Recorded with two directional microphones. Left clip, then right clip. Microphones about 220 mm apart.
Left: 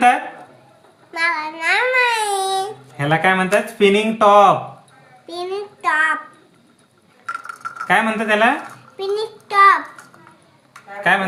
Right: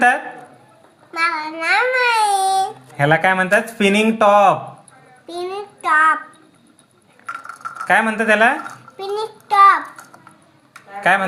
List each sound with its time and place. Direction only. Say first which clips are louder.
1.1 s child singing: even; 5° left (ahead or behind)
3.0 s speech: right 2 dB; 35° right (ahead or behind)
5.3 s child singing: left 1 dB; centre (ahead or behind)
7.3 s chink: left 1 dB; centre (ahead or behind)
7.9 s speech: right 2 dB; 40° right (ahead or behind)
9.0 s child singing: left 2 dB; centre (ahead or behind)